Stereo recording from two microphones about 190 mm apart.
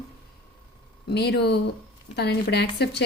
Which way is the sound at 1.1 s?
60° left (ahead or behind).